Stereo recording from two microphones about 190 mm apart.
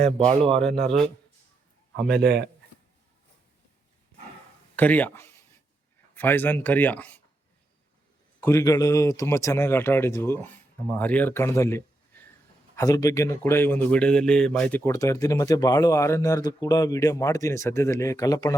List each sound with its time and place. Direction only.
0.2 s speech: 30° right (ahead or behind)
0.8 s speech: 5° left (ahead or behind)
2.0 s a man's voice: 60° right (ahead or behind)
4.8 s speech: 10° left (ahead or behind)
8.4 s speech: 15° left (ahead or behind)